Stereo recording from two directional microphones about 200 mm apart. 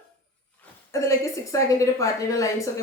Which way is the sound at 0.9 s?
15° left (ahead or behind).